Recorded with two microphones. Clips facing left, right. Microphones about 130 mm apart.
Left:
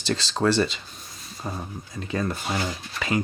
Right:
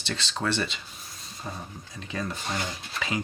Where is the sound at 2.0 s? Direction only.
45° left (ahead or behind).